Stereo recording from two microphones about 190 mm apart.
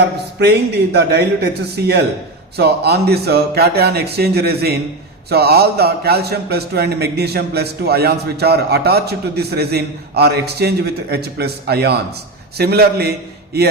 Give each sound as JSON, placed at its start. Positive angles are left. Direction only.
{"t": 0.9, "sound": "a man's voice", "side_deg": -60}